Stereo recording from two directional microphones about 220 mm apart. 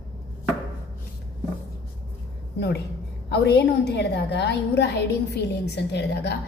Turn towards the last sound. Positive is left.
turn(degrees=50)  # may be behind; listen again after turning